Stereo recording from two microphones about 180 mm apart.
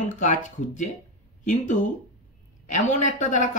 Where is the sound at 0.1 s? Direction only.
45° left (ahead or behind).